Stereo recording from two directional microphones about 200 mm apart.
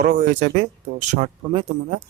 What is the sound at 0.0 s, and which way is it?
Speech, 40° right (ahead or behind).